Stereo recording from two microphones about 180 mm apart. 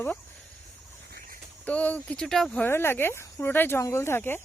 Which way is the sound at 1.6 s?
10° left (ahead or behind).